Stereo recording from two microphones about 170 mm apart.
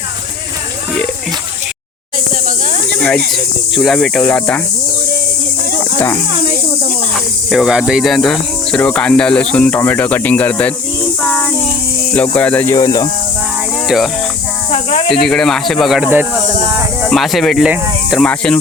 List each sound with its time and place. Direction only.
3.3 s speech: centre (ahead or behind)
7.1 s speech: centre (ahead or behind)
11.2 s child singing: 5° left (ahead or behind)
12.1 s speech: 10° left (ahead or behind)
13.8 s speech: centre (ahead or behind)
14.7 s snake: 40° left (ahead or behind)
15.1 s speech: centre (ahead or behind)
16.4 s a sound: 40° right (ahead or behind)
17.0 s speech: centre (ahead or behind)